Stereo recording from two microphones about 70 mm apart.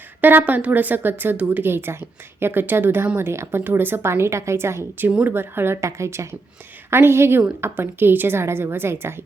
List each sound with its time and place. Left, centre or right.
0.2 s a woman's voice: right